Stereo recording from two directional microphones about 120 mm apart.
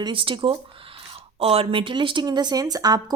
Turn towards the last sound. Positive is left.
turn(degrees=-30)  # may be behind; listen again after turning